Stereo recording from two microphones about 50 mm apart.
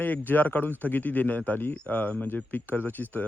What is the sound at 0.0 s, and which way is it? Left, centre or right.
Speech, left.